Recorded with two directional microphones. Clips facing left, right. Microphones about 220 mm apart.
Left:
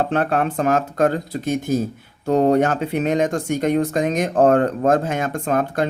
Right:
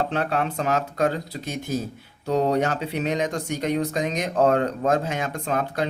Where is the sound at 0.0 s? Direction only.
50° left (ahead or behind).